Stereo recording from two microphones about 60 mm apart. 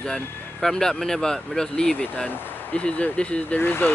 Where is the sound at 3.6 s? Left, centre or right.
Left.